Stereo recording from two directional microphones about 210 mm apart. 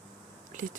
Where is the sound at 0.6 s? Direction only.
40° right (ahead or behind).